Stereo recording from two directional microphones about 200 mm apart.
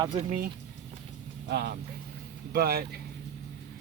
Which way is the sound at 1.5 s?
55° right (ahead or behind).